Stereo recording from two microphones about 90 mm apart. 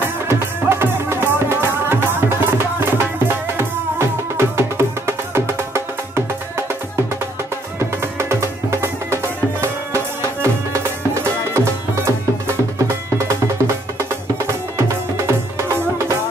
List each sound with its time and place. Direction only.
0.3 s music: 25° right (ahead or behind)
4.4 s music: 30° right (ahead or behind)
7.8 s music: 30° right (ahead or behind)
14.9 s music: 30° right (ahead or behind)